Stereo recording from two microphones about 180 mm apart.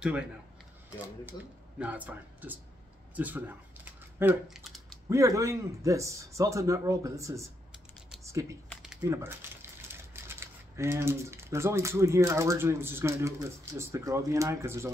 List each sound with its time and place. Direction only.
0.9 s a man's voice: 10° right (ahead or behind)
8.2 s typing: 15° right (ahead or behind)
8.6 s a sound: 5° right (ahead or behind)
9.0 s speech: 15° right (ahead or behind)